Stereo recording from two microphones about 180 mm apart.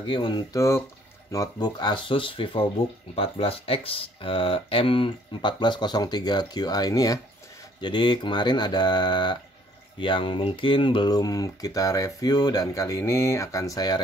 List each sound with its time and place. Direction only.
0.0 s speech: 25° left (ahead or behind)